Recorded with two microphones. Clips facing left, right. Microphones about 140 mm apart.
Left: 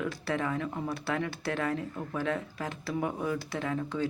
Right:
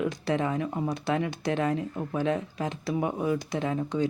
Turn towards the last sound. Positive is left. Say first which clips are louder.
# right 4 dB
turn(degrees=-20)  # may be behind; listen again after turning